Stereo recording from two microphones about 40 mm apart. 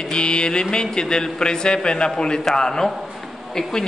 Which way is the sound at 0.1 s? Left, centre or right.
Left.